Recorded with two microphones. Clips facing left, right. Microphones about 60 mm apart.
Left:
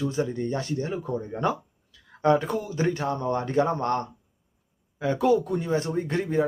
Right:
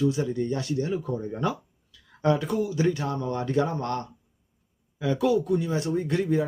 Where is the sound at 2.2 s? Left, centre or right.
Left.